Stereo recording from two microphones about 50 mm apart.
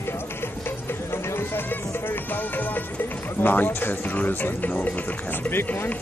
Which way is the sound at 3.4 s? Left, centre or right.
Left.